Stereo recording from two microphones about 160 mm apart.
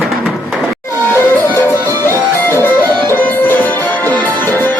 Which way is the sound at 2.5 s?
15° left (ahead or behind).